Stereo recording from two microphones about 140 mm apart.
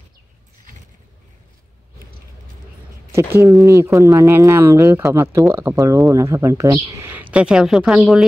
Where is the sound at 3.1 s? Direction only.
20° right (ahead or behind); by 8.2 s centre (ahead or behind).